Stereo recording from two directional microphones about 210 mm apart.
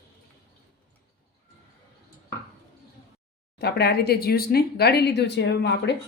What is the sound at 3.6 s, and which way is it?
Speech, 50° left (ahead or behind).